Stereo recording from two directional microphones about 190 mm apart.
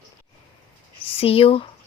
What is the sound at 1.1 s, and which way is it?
Speech, 30° left (ahead or behind).